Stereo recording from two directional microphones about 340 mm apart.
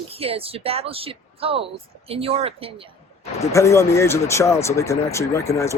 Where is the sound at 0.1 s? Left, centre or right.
Centre.